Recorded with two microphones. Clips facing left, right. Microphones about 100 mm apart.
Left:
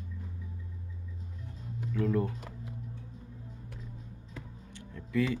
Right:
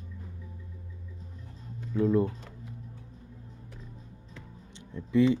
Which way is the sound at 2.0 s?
20° right (ahead or behind).